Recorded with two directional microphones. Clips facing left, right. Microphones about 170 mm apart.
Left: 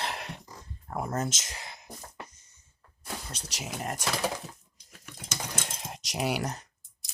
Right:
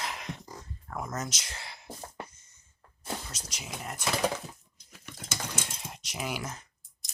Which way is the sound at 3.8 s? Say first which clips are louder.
Left 7 dB; 40° left (ahead or behind).